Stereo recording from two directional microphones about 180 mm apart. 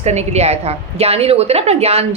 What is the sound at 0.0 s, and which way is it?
Speech, 40° right (ahead or behind).